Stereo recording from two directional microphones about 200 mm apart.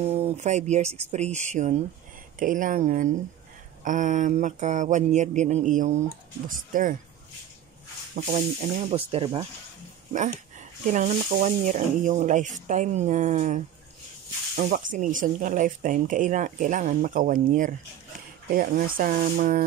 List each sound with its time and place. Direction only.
0.0 s speech: 30° right (ahead or behind)
8.1 s speech: 40° right (ahead or behind)
10.9 s speech: 40° right (ahead or behind)